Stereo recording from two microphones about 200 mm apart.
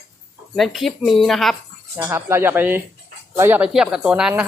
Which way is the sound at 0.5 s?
Centre (ahead or behind).